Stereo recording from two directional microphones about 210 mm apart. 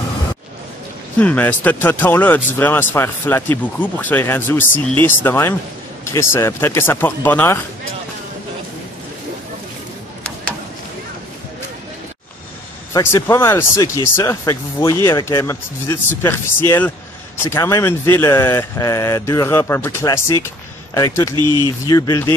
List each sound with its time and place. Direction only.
1.2 s speech: 5° left (ahead or behind)
12.9 s speech: 15° left (ahead or behind)
21.4 s speech: 20° right (ahead or behind)
21.8 s speech: 15° left (ahead or behind)